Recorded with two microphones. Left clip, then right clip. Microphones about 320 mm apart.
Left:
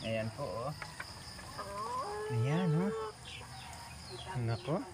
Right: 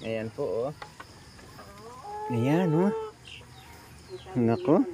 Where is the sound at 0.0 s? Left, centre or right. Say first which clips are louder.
Right 4 dB; centre.